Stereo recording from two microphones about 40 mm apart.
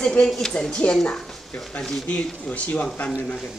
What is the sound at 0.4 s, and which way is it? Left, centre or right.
Speech, centre.